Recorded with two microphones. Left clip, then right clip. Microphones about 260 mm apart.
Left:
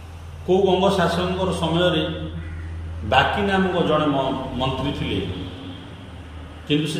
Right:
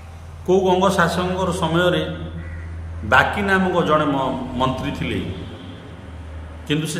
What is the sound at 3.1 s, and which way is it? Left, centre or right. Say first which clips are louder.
Speech: right 2 dB; centre.